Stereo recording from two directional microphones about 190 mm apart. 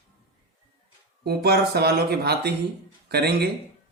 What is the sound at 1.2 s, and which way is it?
Speech, 60° right (ahead or behind).